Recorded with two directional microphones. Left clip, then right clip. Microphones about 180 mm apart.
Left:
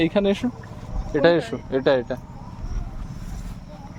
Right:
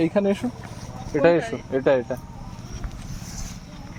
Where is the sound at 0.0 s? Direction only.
15° left (ahead or behind).